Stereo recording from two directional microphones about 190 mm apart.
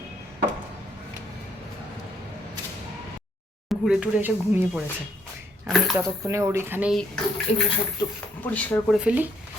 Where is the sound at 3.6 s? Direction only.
Centre (ahead or behind).